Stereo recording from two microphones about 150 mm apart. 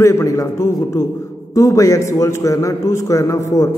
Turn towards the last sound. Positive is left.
turn(degrees=20)  # may be behind; listen again after turning